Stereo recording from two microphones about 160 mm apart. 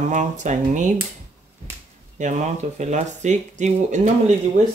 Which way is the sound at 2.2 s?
50° right (ahead or behind).